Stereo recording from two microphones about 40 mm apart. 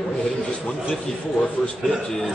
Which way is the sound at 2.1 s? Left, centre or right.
Centre.